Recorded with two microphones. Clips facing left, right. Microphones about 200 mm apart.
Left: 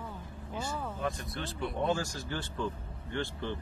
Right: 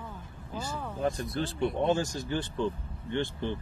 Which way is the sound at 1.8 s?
20° right (ahead or behind).